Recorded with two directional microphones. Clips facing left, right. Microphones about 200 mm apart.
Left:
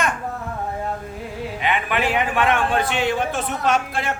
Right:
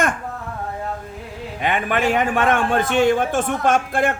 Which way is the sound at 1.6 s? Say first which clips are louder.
Right 3 dB; 45° right (ahead or behind).